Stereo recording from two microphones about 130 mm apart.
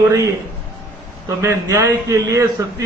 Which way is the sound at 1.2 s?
25° right (ahead or behind).